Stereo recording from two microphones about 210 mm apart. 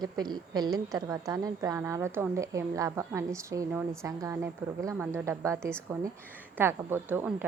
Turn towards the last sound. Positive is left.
turn(degrees=-10)  # may be behind; listen again after turning